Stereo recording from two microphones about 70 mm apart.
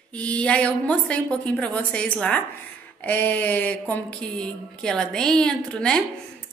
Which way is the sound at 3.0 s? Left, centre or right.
Left.